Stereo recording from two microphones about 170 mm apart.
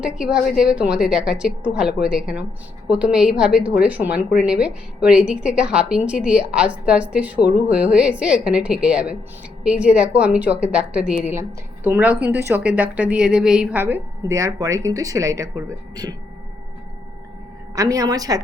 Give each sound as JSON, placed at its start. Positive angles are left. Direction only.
{"t": 0.0, "sound": "a woman's voice", "side_deg": -5}
{"t": 17.7, "sound": "a woman's voice", "side_deg": -20}